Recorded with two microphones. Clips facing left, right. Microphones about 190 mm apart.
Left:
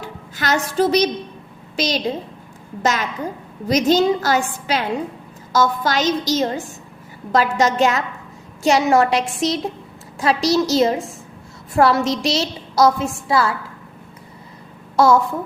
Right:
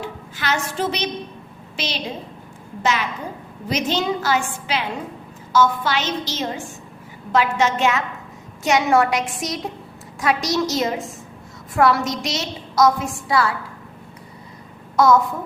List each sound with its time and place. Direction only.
0.0 s a woman's voice: 40° left (ahead or behind); by 13.5 s 25° left (ahead or behind)
14.9 s a woman's voice: 30° left (ahead or behind)